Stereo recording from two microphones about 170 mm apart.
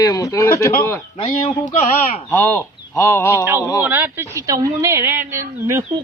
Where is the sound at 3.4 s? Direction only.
10° right (ahead or behind).